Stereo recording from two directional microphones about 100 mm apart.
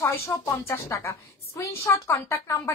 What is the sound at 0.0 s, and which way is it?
A woman's voice, 30° left (ahead or behind).